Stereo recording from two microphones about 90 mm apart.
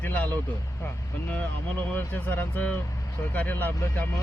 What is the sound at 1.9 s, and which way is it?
Speech, 20° left (ahead or behind).